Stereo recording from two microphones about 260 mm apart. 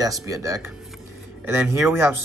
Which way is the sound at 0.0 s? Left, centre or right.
Centre.